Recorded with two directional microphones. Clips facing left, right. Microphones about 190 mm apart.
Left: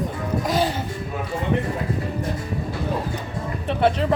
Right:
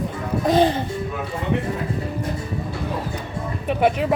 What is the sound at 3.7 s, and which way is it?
Speech, 10° right (ahead or behind).